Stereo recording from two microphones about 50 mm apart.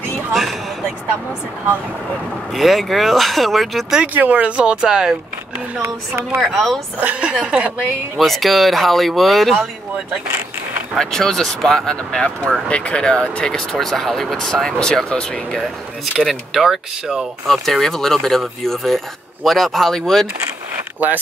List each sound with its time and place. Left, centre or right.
0.3 s speech: centre
2.5 s speech: centre
4.1 s speech: right; by 5.1 s centre
5.8 s speech: right
6.4 s speech: centre
7.0 s speech: right
8.2 s speech: centre
11.0 s speech: centre
16.2 s speech: centre
17.5 s speech: centre